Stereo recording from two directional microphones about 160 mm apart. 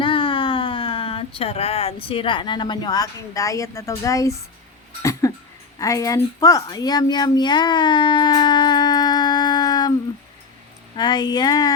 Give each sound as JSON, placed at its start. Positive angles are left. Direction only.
{"t": 0.0, "sound": "speech", "side_deg": 30}
{"t": 5.2, "sound": "cough", "side_deg": 20}
{"t": 5.8, "sound": "speech", "side_deg": 20}
{"t": 10.9, "sound": "speech", "side_deg": 25}